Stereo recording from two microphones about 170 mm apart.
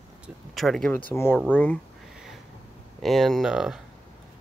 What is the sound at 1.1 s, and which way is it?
Speech, 15° left (ahead or behind).